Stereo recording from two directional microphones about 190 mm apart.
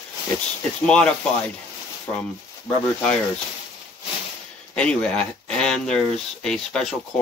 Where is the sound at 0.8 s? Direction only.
5° left (ahead or behind).